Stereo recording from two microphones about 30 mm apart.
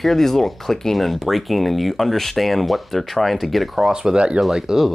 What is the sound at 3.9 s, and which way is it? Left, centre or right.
Speech, right.